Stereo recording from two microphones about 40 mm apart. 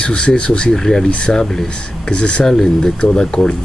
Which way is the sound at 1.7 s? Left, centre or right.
Left.